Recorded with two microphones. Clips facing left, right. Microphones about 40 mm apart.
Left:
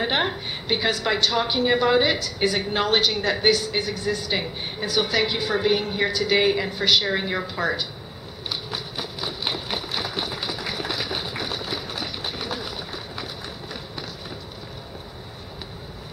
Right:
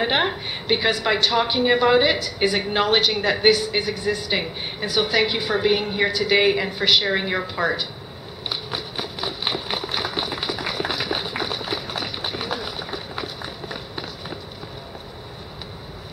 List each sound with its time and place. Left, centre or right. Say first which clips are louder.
0.0 s a woman's voice: right 2 dB; centre
8.5 s run: right 2 dB; centre